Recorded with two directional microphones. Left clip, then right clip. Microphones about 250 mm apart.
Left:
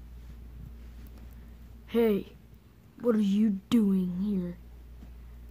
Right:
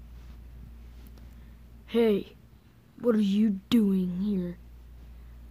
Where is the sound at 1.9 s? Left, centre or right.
Centre.